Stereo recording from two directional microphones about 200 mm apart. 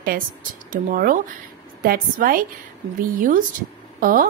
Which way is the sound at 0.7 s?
45° right (ahead or behind).